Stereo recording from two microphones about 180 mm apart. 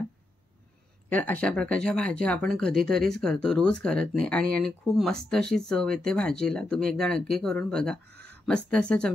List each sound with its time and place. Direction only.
1.1 s speech: 10° left (ahead or behind)
8.1 s a sound: 60° right (ahead or behind)
8.5 s speech: 5° left (ahead or behind)